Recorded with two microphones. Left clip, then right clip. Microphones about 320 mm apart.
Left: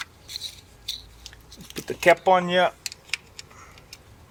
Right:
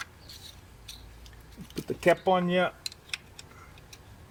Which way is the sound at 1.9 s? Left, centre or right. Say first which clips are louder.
Left 6 dB; left.